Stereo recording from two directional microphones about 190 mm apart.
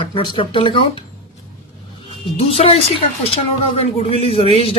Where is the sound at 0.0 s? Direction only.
25° left (ahead or behind).